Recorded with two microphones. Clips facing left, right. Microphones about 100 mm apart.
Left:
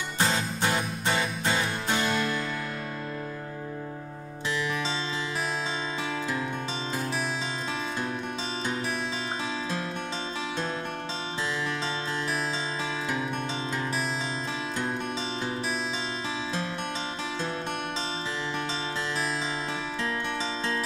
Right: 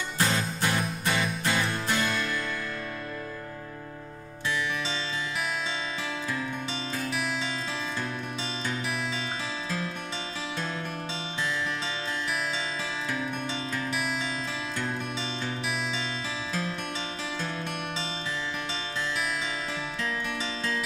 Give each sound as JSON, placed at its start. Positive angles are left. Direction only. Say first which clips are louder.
{"t": 0.2, "sound": "music", "louder": "left 1 dB", "side_deg": 25}